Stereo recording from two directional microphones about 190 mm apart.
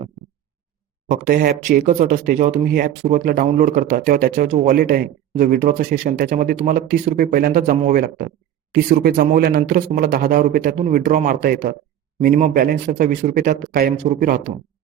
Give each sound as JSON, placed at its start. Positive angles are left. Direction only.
{"t": 1.1, "sound": "speech", "side_deg": -45}